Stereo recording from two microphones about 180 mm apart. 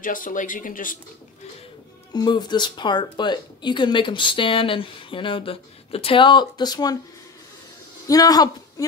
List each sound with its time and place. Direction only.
0.0 s speech: 50° left (ahead or behind)
2.1 s speech: 25° left (ahead or behind)
8.1 s speech: 20° left (ahead or behind)